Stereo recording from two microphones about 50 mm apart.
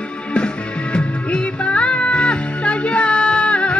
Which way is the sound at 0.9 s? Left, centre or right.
Left.